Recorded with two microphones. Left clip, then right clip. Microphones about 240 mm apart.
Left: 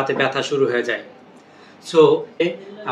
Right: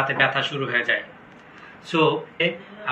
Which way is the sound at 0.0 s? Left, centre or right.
Centre.